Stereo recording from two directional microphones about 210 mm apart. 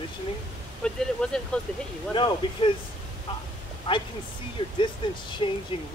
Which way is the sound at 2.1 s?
25° left (ahead or behind).